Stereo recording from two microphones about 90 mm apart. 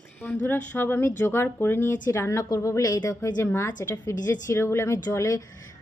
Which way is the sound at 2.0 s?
35° left (ahead or behind).